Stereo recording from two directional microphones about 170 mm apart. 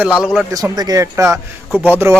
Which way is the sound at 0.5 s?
20° right (ahead or behind).